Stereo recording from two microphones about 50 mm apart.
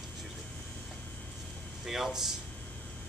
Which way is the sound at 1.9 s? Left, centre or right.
Centre.